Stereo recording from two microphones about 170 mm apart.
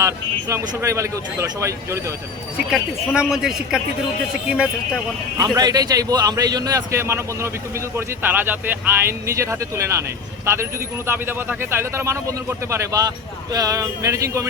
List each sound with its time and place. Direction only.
0.0 s speech: 15° right (ahead or behind)
2.6 s speech: 5° right (ahead or behind)
5.4 s a man's voice: 20° right (ahead or behind)